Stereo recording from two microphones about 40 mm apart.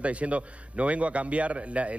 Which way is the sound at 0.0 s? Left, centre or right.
Right.